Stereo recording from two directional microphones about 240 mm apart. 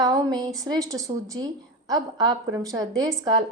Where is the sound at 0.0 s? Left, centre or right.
Centre.